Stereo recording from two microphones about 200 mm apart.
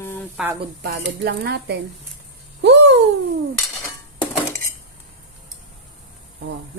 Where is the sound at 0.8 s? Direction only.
50° right (ahead or behind).